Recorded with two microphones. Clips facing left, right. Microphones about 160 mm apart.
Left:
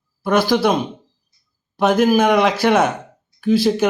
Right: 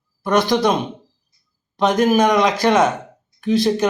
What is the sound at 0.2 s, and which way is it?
Speech, 5° left (ahead or behind).